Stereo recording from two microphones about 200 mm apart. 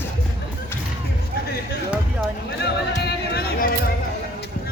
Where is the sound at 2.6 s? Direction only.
55° left (ahead or behind).